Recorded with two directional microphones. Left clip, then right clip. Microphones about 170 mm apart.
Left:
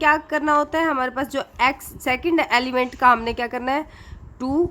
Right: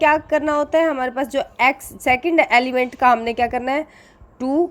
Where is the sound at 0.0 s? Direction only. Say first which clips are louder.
Right 3 dB; 15° right (ahead or behind).